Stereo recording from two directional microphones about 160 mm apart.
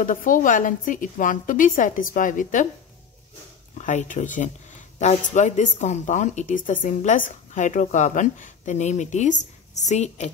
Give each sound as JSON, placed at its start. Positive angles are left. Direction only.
{"t": 0.0, "sound": "a woman's voice", "side_deg": 55}
{"t": 3.7, "sound": "a woman's voice", "side_deg": 50}